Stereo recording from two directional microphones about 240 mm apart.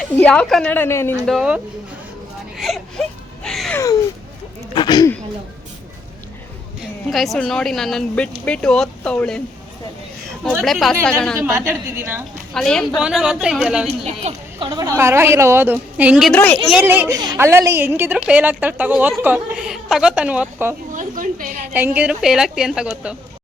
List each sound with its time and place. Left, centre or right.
0.0 s a woman's voice: centre
1.3 s a woman's voice: centre
2.6 s whimper: centre
4.7 s speech: centre
7.1 s a woman's voice: centre
10.4 s a woman's voice: centre
11.3 s a woman's voice: centre
12.5 s a woman's voice: centre
13.8 s a woman's voice: right; by 16.6 s centre
16.6 s a woman's voice: centre
20.9 s a woman's voice: right
21.7 s a woman's voice: centre